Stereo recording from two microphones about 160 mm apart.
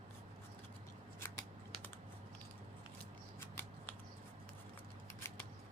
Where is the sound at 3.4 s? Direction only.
15° left (ahead or behind).